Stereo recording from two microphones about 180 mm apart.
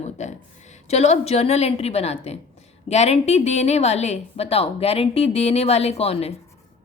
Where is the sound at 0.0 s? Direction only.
40° left (ahead or behind).